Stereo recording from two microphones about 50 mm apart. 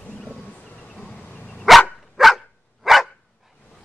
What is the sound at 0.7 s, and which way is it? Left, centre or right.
Bee, left.